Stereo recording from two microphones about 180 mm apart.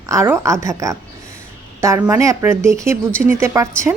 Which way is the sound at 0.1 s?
15° right (ahead or behind).